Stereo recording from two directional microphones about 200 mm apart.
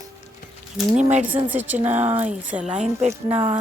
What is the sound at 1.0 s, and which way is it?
Speech, 35° right (ahead or behind).